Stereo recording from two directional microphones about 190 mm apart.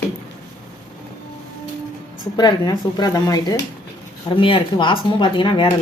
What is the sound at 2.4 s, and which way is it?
Speech, 20° left (ahead or behind).